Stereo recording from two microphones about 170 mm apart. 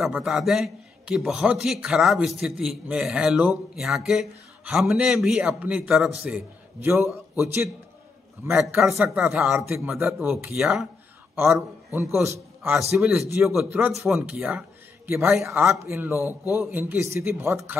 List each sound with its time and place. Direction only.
0.0 s a man's voice: centre (ahead or behind)
11.3 s a man's voice: 15° right (ahead or behind)
12.9 s a man's voice: 5° right (ahead or behind)